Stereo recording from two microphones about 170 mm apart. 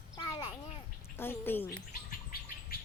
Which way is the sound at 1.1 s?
15° left (ahead or behind).